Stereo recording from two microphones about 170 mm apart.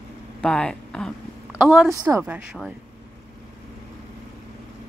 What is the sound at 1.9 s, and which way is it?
Speech, 20° right (ahead or behind).